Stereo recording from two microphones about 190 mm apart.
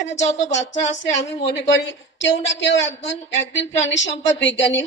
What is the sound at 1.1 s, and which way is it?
A woman's voice, 70° left (ahead or behind).